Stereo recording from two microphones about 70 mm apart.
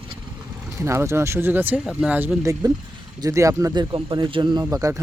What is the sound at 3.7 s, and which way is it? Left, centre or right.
Speech, right.